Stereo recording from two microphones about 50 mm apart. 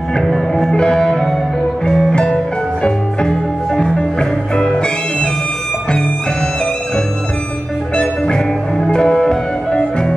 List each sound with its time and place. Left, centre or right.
0.2 s music: centre
2.1 s music: centre
7.9 s music: centre